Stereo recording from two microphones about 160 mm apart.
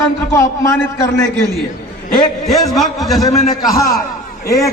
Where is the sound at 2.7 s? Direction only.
Centre (ahead or behind).